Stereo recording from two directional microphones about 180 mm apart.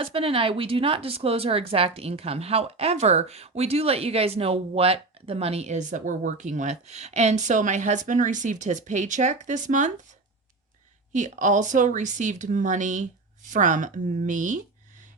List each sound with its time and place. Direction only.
0.0 s speech: 30° right (ahead or behind)
11.1 s speech: 45° right (ahead or behind)